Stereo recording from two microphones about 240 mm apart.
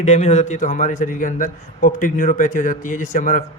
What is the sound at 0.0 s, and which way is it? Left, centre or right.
A man's voice, left.